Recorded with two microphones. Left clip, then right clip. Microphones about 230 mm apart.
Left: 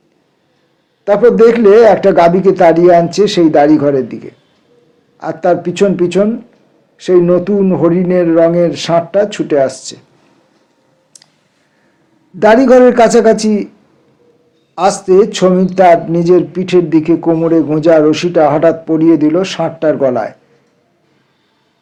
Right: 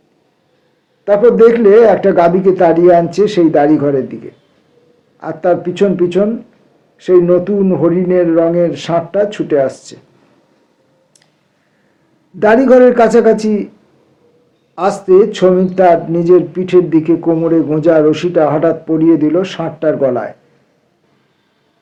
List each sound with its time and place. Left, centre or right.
1.0 s a man's voice: left
12.4 s speech: left
14.8 s speech: left